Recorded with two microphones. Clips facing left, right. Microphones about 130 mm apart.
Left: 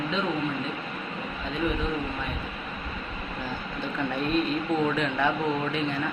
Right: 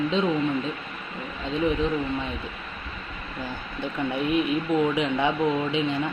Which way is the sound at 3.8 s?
15° right (ahead or behind).